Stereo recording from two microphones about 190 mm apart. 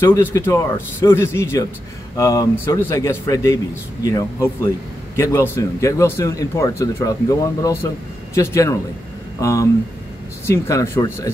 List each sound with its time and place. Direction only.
0.0 s speech: 15° left (ahead or behind)